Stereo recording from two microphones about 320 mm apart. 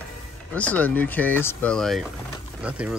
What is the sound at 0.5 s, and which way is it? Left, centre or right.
Speech, centre.